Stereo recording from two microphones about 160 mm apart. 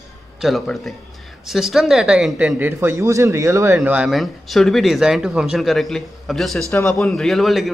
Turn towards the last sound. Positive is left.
turn(degrees=0)  # may be behind; listen again after turning